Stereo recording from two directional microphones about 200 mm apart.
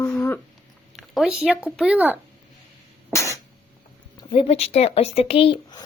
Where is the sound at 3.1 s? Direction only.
15° left (ahead or behind).